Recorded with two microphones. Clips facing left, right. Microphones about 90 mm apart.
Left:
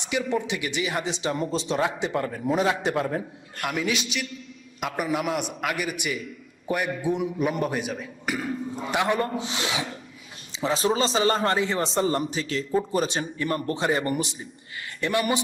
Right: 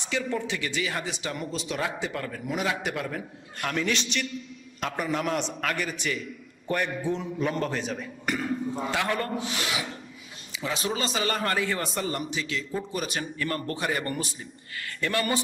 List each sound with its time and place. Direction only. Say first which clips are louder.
0.0 s a man's voice: left 3 dB; 15° left (ahead or behind)
3.6 s a man's voice: left 1 dB; 10° left (ahead or behind)
8.9 s a man's voice: left 6 dB; 20° left (ahead or behind)
10.5 s a man's voice: left 6 dB; 30° left (ahead or behind)